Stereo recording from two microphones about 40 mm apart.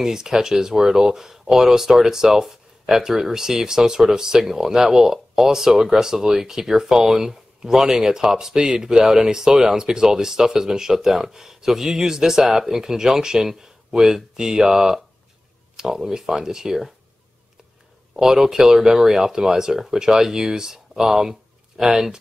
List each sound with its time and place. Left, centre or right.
0.0 s speech: centre
18.1 s speech: centre